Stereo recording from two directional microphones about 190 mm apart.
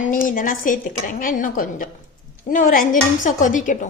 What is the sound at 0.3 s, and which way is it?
Speech, 45° left (ahead or behind).